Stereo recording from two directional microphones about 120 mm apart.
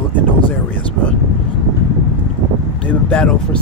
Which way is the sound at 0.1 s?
15° left (ahead or behind).